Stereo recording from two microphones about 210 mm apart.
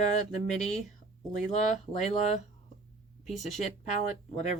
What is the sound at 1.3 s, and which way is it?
Speech, 35° left (ahead or behind).